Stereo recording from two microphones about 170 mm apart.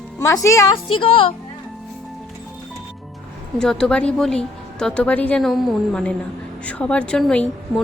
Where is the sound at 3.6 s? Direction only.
5° left (ahead or behind).